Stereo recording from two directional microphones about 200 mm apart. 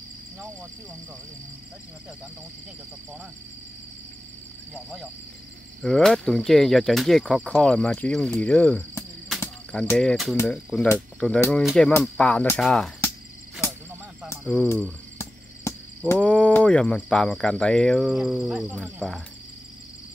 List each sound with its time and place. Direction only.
5.8 s speech: centre (ahead or behind)
14.4 s speech: centre (ahead or behind)
16.1 s speech: 5° left (ahead or behind)